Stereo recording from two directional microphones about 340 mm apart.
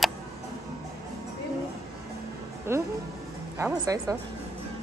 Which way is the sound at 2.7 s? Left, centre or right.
Centre.